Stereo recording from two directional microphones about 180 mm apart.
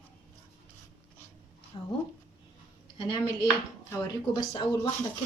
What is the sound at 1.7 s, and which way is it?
Speech, 30° left (ahead or behind).